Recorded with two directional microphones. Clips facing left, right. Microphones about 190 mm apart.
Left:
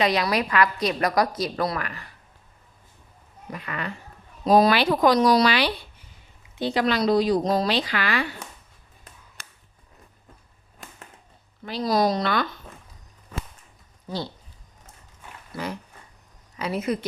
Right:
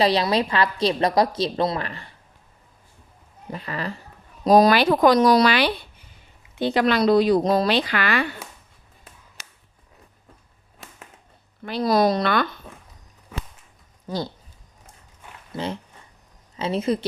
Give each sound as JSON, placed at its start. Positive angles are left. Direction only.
{"t": 0.0, "sound": "a woman's voice", "side_deg": -30}
{"t": 3.5, "sound": "speech", "side_deg": -30}
{"t": 11.6, "sound": "speech", "side_deg": -60}
{"t": 15.5, "sound": "a woman's voice", "side_deg": -25}